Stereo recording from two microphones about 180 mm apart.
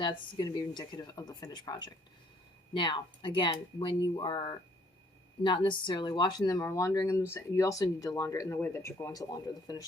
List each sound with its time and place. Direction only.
0.0 s speech: 25° left (ahead or behind)